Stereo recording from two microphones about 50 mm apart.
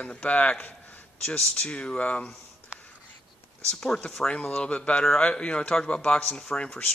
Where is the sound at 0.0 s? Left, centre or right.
Left.